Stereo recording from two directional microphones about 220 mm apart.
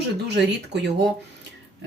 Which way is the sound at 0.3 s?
50° right (ahead or behind).